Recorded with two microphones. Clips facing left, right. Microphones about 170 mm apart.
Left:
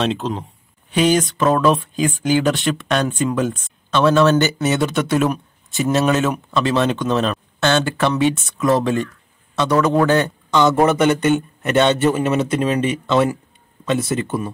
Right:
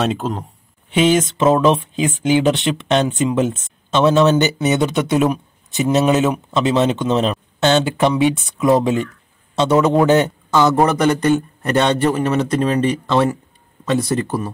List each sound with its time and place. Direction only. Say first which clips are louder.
0.0 s a man's voice: right 1 dB; 5° right (ahead or behind)
0.8 s speech: right 1 dB; 20° right (ahead or behind)
10.5 s a man's voice: even; centre (ahead or behind)